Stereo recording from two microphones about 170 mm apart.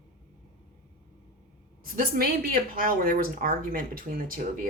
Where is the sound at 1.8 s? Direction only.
60° right (ahead or behind).